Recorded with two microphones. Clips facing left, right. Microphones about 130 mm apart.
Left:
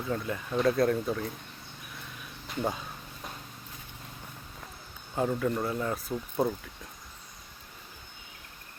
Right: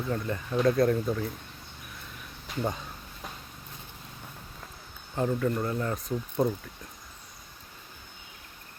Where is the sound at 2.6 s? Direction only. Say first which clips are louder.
Even; centre (ahead or behind).